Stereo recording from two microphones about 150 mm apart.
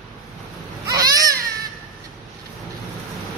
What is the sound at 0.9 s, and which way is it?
Baby cry, 25° right (ahead or behind).